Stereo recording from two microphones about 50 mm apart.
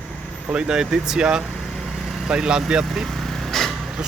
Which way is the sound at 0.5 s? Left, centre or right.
Centre.